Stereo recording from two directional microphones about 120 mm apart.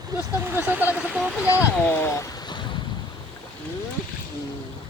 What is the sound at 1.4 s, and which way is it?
Speech, 20° left (ahead or behind).